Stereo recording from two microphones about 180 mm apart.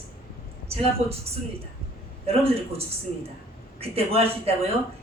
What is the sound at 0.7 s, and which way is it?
A woman's voice, 35° right (ahead or behind).